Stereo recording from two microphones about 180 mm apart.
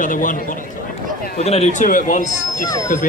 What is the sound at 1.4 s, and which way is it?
Speech, 35° left (ahead or behind).